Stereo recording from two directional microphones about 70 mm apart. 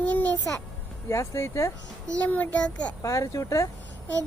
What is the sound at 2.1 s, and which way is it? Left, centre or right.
Speech, left.